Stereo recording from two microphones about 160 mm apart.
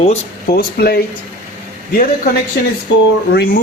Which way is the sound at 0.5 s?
80° left.